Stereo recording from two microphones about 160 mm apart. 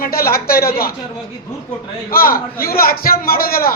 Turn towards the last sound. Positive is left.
turn(degrees=65)  # may be behind; listen again after turning